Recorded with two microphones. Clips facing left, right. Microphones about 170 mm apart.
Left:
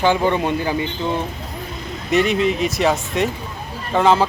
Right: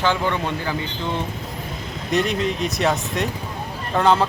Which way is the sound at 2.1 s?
Centre (ahead or behind).